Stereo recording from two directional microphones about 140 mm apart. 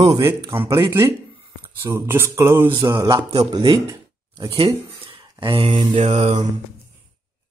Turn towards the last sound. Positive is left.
turn(degrees=-55)  # may be behind; listen again after turning